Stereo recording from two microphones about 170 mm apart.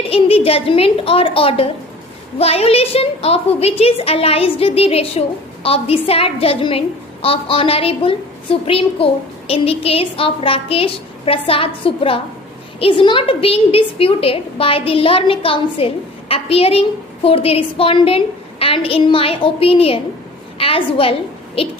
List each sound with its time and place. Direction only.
0.1 s a woman's voice: 35° left (ahead or behind)